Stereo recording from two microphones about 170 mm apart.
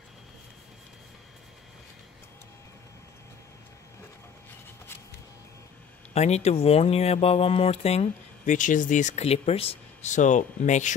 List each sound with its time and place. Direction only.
6.1 s speech: 40° left (ahead or behind)